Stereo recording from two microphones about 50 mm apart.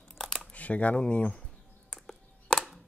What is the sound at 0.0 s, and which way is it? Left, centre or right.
Crumpling, centre.